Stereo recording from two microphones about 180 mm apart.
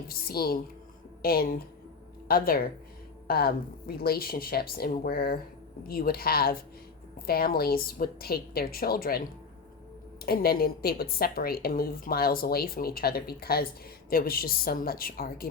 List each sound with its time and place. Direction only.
0.1 s a woman's voice: 55° left (ahead or behind)
10.2 s a woman's voice: 55° left (ahead or behind)